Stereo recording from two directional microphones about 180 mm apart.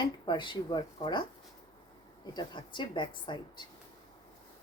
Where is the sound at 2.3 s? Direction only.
25° left (ahead or behind).